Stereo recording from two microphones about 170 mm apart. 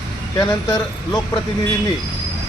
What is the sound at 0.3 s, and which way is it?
Speech, 20° left (ahead or behind).